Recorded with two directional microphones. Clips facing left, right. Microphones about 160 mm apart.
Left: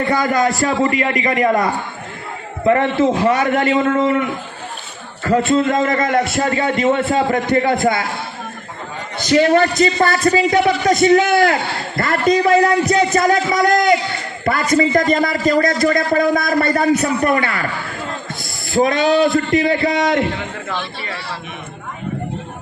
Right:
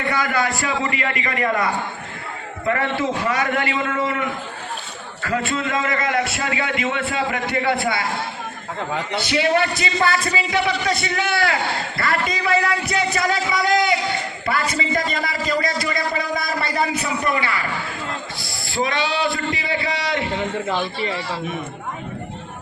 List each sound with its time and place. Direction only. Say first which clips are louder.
0.1 s a man's voice: left 4 dB; 35° left (ahead or behind)
2.6 s a man's voice: left 8 dB; 35° left (ahead or behind)
5.2 s a man's voice: left 9 dB; 40° left (ahead or behind)
9.1 s a man's voice: left 7 dB; 45° left (ahead or behind)
18.7 s a man's voice: left 8 dB; 45° left (ahead or behind)
20.7 s a man's voice: right 3 dB; 15° right (ahead or behind)